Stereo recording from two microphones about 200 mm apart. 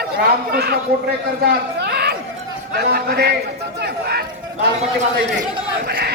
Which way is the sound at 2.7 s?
50° right (ahead or behind).